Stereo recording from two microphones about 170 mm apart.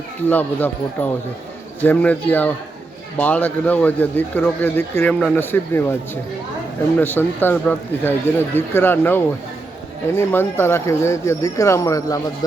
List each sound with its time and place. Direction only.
0.3 s speech: 10° left (ahead or behind)
7.0 s speech: 10° left (ahead or behind)